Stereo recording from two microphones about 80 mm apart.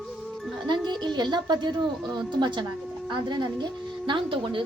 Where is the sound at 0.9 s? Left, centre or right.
Right.